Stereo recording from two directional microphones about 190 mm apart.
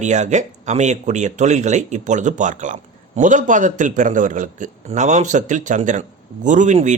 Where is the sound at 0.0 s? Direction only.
40° right (ahead or behind).